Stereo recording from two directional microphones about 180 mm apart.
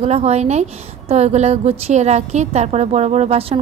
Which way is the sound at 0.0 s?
35° right (ahead or behind).